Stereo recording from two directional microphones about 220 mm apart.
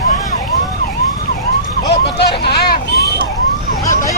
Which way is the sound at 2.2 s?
45° left (ahead or behind).